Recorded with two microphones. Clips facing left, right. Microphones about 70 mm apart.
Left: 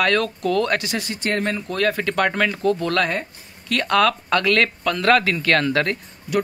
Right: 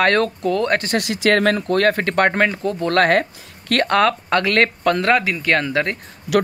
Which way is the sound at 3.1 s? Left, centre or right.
Right.